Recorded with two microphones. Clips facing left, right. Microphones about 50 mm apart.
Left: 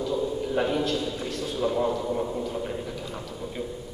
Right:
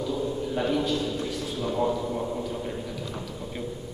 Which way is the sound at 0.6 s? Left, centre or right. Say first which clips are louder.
Left 1 dB; centre.